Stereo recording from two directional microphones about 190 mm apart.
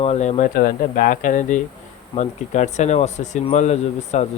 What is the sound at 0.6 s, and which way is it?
Speech, 50° left (ahead or behind).